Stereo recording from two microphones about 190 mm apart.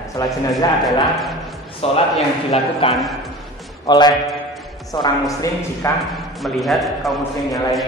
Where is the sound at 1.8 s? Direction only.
30° left (ahead or behind).